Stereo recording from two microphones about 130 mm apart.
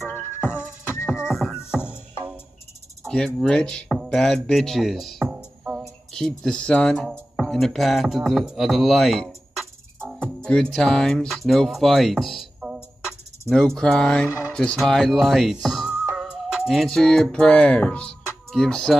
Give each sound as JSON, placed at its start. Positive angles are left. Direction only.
{"t": 1.0, "sound": "music", "side_deg": -5}
{"t": 3.1, "sound": "speech", "side_deg": 5}
{"t": 5.2, "sound": "music", "side_deg": -10}
{"t": 5.8, "sound": "speech", "side_deg": 0}